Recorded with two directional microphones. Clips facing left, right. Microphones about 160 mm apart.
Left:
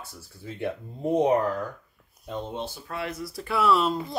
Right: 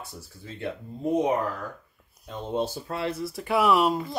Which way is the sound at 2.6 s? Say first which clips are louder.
Right 5 dB; 30° right (ahead or behind).